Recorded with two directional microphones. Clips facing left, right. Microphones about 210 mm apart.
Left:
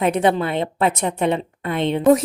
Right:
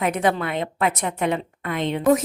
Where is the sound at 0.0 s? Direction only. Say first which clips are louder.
Left 4 dB; 30° left (ahead or behind).